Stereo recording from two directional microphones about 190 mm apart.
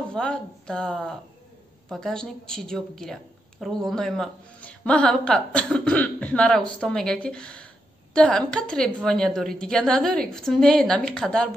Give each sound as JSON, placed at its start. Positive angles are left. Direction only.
{"t": 0.1, "sound": "a woman's voice", "side_deg": 5}